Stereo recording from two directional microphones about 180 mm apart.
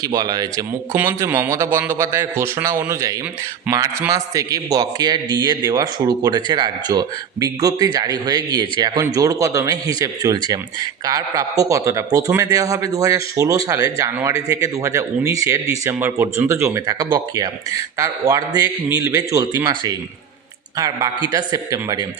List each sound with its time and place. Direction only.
0.0 s a man's voice: 20° right (ahead or behind)